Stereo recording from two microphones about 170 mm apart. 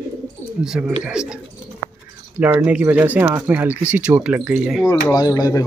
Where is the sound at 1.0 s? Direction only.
5° right (ahead or behind).